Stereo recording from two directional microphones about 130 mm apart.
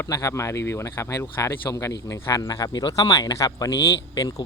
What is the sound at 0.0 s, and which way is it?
Speech, 25° left (ahead or behind).